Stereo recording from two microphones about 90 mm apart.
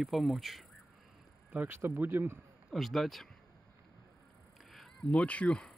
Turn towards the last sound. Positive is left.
turn(degrees=15)  # may be behind; listen again after turning